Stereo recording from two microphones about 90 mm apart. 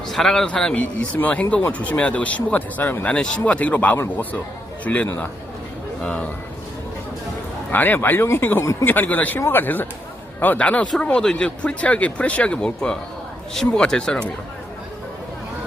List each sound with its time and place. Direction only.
0.1 s a man's voice: 5° left (ahead or behind)
7.7 s a man's voice: 20° left (ahead or behind)